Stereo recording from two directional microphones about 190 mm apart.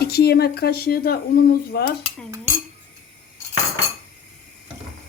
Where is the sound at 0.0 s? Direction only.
55° left (ahead or behind).